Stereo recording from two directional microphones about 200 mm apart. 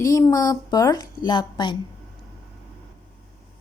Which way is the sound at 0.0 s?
15° left (ahead or behind).